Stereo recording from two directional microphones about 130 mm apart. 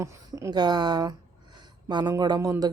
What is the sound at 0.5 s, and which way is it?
Speech, 35° right (ahead or behind).